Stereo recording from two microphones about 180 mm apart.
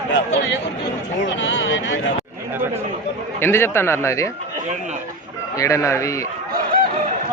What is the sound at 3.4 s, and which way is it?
Speech, 10° left (ahead or behind).